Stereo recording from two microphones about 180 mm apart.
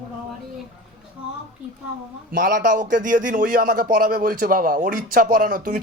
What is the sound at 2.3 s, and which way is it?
A man's voice, 50° right (ahead or behind).